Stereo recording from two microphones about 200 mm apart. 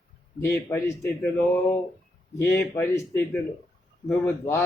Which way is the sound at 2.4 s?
15° left (ahead or behind).